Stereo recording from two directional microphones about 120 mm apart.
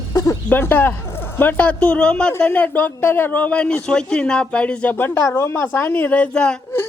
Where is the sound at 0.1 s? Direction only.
30° left (ahead or behind).